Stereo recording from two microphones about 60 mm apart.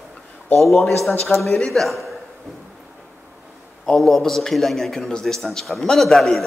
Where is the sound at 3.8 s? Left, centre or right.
Centre.